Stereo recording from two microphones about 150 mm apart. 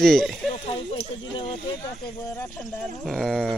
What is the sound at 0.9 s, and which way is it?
Speech, 35° left (ahead or behind).